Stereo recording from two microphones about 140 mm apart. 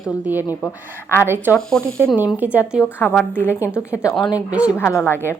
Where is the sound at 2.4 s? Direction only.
10° right (ahead or behind).